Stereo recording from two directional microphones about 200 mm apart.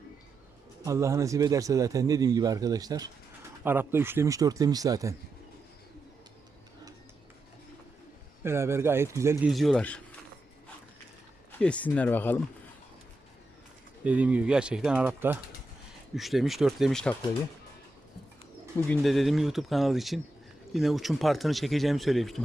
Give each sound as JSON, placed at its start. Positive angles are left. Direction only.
{"t": 0.9, "sound": "a man's voice", "side_deg": -15}
{"t": 8.4, "sound": "a man's voice", "side_deg": -15}
{"t": 9.5, "sound": "speech", "side_deg": 0}
{"t": 11.5, "sound": "speech", "side_deg": 5}
{"t": 14.0, "sound": "a man's voice", "side_deg": -5}
{"t": 18.9, "sound": "speech", "side_deg": 0}